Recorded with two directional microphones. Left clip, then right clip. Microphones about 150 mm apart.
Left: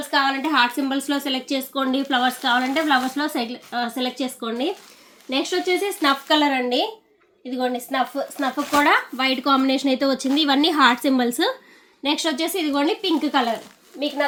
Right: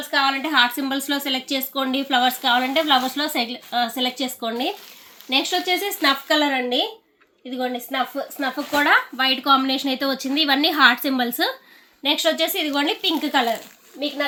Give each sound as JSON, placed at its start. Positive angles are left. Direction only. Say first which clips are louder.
{"t": 0.1, "sound": "a woman's voice", "louder": "even", "side_deg": 0}
{"t": 4.2, "sound": "speech", "louder": "right 1 dB", "side_deg": -40}
{"t": 5.8, "sound": "speech", "louder": "even", "side_deg": -20}
{"t": 6.4, "sound": "a woman's voice", "louder": "left 1 dB", "side_deg": 0}